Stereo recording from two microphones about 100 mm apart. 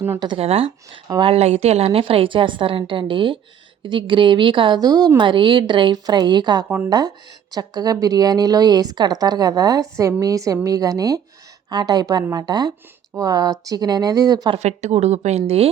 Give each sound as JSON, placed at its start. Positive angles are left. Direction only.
{"t": 0.3, "sound": "a woman's voice", "side_deg": -80}
{"t": 14.5, "sound": "a woman's voice", "side_deg": -90}